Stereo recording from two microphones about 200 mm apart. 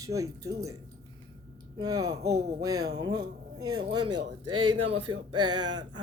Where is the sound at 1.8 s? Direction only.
15° right (ahead or behind).